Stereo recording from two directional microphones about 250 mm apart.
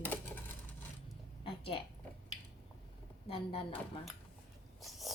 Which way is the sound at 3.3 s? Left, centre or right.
Left.